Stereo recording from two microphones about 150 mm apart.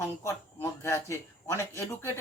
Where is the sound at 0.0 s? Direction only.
20° left (ahead or behind).